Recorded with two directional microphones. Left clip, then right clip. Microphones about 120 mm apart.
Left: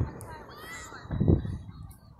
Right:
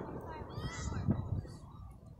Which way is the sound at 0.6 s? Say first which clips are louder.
Left 3 dB; 80° left.